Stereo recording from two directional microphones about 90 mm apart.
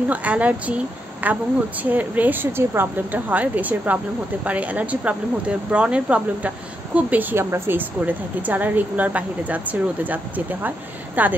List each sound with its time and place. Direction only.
0.1 s a woman's voice: 15° right (ahead or behind)